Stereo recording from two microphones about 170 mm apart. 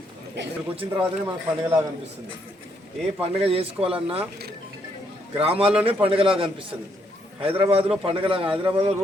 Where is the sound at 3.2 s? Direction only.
35° right (ahead or behind).